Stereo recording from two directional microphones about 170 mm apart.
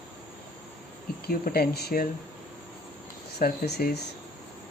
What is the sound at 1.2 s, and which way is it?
Speech, 60° left (ahead or behind).